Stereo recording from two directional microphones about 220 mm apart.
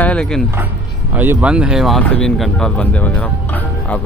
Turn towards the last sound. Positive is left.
turn(degrees=5)  # may be behind; listen again after turning